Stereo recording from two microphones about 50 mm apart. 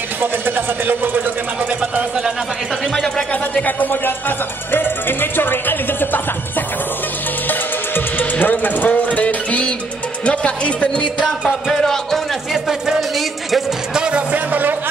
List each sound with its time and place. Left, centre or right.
0.2 s speech: right
3.5 s speech: left
4.6 s music: left
7.4 s music: left
10.2 s speech: left
11.0 s music: centre
11.7 s a man's voice: centre
12.6 s a sound: centre
13.9 s music: centre
14.3 s a sound: right